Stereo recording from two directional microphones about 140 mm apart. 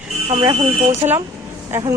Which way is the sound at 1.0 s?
35° right (ahead or behind).